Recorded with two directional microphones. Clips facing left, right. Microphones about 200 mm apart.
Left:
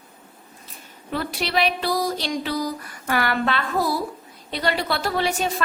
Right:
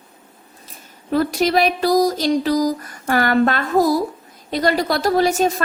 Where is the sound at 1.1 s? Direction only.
40° right (ahead or behind).